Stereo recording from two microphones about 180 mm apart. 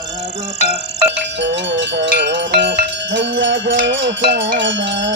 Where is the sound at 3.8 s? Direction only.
90° right.